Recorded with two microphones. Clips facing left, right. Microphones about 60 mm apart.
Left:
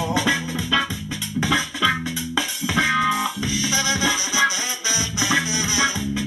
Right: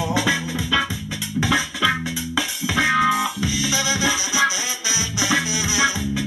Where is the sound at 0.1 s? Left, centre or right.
Centre.